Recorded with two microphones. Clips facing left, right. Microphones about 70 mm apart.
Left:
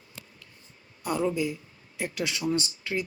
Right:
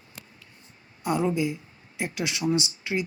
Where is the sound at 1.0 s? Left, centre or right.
Centre.